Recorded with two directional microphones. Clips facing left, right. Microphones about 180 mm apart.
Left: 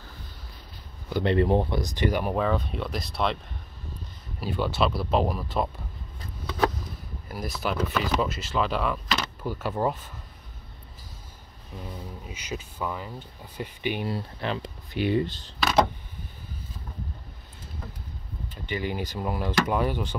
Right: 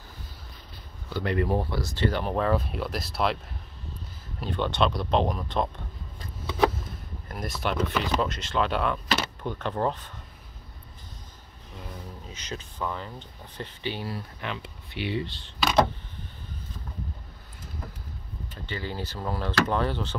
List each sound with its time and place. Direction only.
1.1 s speech: 25° left (ahead or behind); by 2.4 s 10° left (ahead or behind)
2.4 s speech: 5° right (ahead or behind)
4.4 s speech: 5° left (ahead or behind)
7.2 s speech: centre (ahead or behind)
12.3 s speech: 10° left (ahead or behind); by 15.5 s 45° left (ahead or behind)
18.7 s speech: 15° left (ahead or behind)